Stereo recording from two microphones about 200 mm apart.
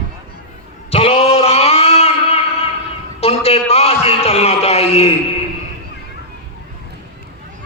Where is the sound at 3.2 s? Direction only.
30° left (ahead or behind).